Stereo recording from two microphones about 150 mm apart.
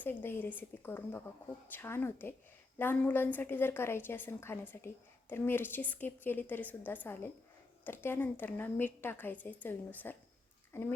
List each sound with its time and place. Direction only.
0.0 s a woman's voice: 15° left (ahead or behind)